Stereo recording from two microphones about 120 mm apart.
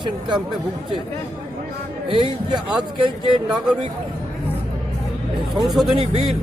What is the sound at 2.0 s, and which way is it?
Speech, 45° right (ahead or behind).